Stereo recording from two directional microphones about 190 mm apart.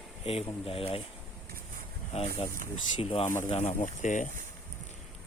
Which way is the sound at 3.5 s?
30° left (ahead or behind).